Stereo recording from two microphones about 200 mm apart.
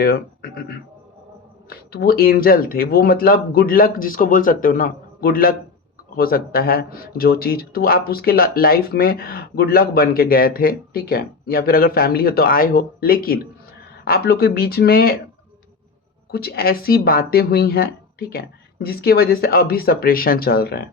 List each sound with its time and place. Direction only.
0.0 s speech: 50° left (ahead or behind)
1.9 s speech: 50° left (ahead or behind)
16.3 s speech: 50° left (ahead or behind)